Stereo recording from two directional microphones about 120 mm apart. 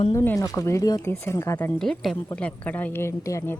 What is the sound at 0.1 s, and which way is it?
Speech, 25° left (ahead or behind).